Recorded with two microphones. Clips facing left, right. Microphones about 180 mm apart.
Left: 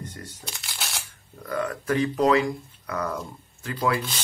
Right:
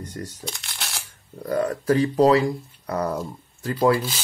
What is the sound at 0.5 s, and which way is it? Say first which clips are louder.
Shuffling cards: right 1 dB; centre (ahead or behind).